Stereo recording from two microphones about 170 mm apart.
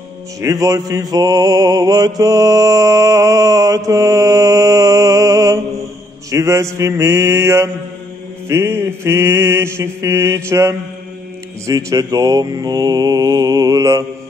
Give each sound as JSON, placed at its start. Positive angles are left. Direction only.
{"t": 0.4, "sound": "mantra", "side_deg": -20}